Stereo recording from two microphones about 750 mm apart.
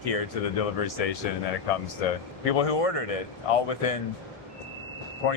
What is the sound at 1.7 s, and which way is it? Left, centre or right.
Speech, left.